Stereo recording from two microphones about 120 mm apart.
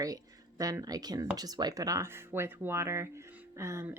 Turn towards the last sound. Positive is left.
turn(degrees=-25)  # may be behind; listen again after turning